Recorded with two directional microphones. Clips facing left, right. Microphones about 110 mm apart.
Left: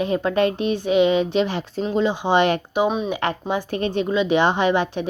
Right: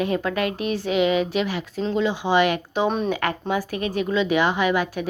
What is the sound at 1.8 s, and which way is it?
A woman's voice, 20° left (ahead or behind).